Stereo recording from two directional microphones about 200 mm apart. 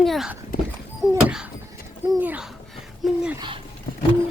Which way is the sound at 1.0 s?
20° right (ahead or behind).